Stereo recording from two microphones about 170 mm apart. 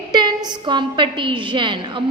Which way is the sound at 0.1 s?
25° right (ahead or behind).